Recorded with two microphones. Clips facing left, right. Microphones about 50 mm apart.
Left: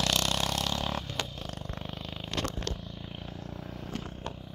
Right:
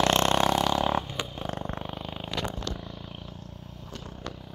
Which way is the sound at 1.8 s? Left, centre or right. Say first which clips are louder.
Right 4 dB; centre.